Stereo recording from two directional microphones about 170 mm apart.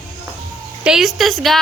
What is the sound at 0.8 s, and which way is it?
Speech, centre (ahead or behind).